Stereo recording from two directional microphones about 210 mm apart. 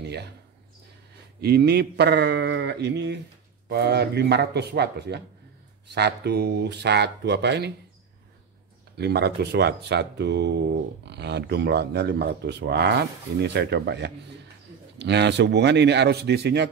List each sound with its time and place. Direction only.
1.4 s speech: 50° right (ahead or behind)
8.9 s speech: 50° right (ahead or behind)